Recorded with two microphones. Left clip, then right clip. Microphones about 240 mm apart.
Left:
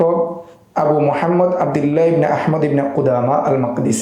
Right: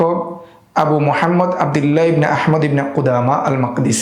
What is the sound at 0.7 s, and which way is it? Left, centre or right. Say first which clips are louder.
A man's voice: even; right.